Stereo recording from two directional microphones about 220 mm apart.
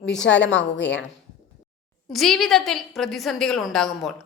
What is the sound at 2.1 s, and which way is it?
A woman's voice, centre (ahead or behind).